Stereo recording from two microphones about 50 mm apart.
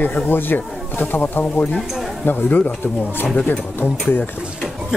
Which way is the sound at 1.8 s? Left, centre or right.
Centre.